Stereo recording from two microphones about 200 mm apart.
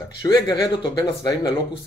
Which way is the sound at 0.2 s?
15° left (ahead or behind).